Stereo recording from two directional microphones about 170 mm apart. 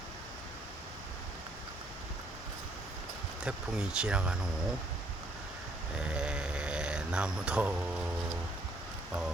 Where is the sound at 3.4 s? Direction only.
5° right (ahead or behind).